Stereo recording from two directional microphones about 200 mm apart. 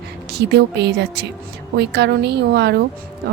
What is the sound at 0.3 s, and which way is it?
A woman's voice, 55° right (ahead or behind).